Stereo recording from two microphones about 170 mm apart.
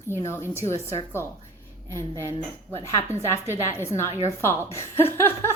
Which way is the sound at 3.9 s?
35° right (ahead or behind).